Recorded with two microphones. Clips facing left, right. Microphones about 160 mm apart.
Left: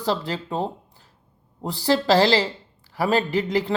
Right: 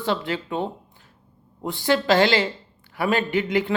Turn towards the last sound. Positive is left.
turn(degrees=35)  # may be behind; listen again after turning